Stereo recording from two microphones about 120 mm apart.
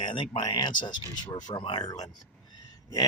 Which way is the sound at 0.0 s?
45° left (ahead or behind).